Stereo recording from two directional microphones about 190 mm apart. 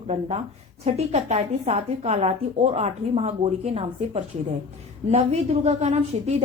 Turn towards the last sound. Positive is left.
turn(degrees=-35)  # may be behind; listen again after turning